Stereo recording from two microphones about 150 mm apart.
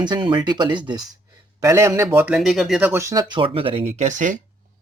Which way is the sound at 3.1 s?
30° right (ahead or behind).